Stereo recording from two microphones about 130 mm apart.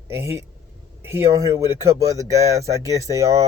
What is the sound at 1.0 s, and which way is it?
Speech, 20° right (ahead or behind).